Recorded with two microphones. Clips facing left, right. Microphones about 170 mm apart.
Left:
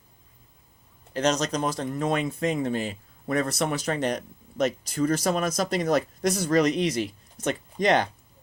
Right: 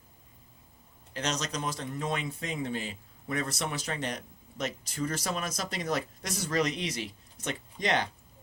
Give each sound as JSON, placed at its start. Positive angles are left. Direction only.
{"t": 1.1, "sound": "speech", "side_deg": 40}